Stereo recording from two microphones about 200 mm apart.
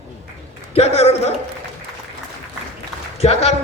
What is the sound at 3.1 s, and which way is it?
Speech, 30° left (ahead or behind).